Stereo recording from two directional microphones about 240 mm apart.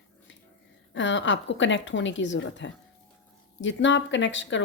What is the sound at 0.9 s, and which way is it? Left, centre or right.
Speech, left.